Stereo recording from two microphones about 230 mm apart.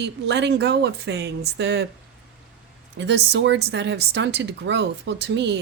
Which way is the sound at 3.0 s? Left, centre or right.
Right.